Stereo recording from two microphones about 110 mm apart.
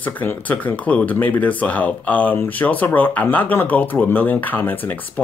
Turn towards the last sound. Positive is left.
turn(degrees=15)  # may be behind; listen again after turning